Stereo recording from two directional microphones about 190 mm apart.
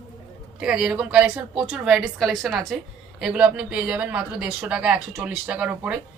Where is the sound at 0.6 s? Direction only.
5° right (ahead or behind).